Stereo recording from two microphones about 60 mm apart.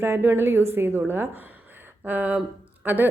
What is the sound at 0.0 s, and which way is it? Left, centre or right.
Speech, right.